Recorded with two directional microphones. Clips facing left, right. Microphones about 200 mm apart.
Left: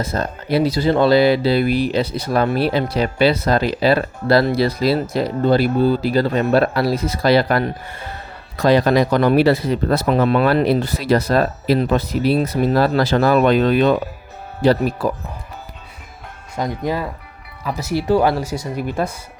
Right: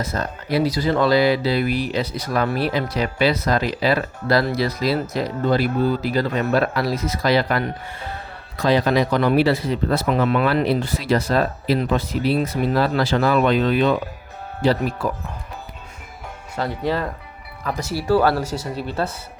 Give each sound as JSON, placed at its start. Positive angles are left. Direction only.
{"t": 0.0, "sound": "speech", "side_deg": 30}
{"t": 16.6, "sound": "speech", "side_deg": 15}
{"t": 17.9, "sound": "speech", "side_deg": 20}